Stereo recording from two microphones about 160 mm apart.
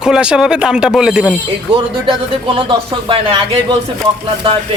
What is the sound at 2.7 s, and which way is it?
Speech, 35° right (ahead or behind).